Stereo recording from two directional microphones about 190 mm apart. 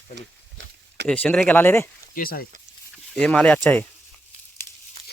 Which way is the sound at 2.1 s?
50° left (ahead or behind).